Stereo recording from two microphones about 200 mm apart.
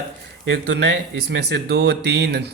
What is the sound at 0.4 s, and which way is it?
Speech, 60° right (ahead or behind).